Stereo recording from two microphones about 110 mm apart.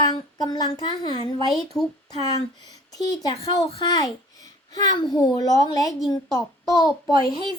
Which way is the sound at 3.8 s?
35° left (ahead or behind).